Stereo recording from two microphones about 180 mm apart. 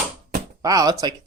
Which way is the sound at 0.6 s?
20° right (ahead or behind).